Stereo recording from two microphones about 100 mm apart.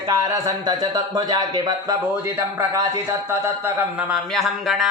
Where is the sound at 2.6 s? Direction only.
30° right (ahead or behind).